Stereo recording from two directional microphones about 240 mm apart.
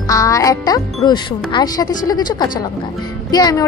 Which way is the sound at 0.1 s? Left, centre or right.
Centre.